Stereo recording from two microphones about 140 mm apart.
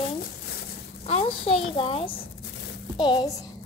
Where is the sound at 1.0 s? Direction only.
45° left (ahead or behind); by 3.3 s 30° left (ahead or behind).